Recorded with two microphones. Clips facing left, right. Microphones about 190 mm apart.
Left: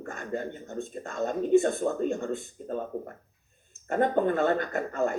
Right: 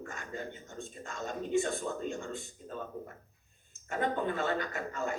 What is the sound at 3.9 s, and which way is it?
Speech, 50° left (ahead or behind).